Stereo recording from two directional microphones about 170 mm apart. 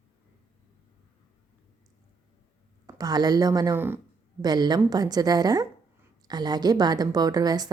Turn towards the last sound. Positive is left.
turn(degrees=-25)  # may be behind; listen again after turning